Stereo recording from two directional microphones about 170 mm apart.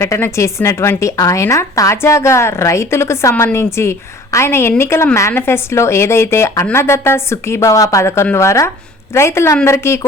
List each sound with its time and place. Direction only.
0.0 s a woman's voice: 15° left (ahead or behind)